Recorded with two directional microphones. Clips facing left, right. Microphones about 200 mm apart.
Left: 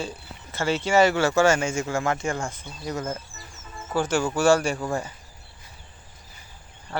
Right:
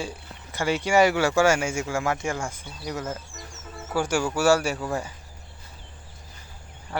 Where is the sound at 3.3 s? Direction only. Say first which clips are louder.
Right 3 dB; 80° right.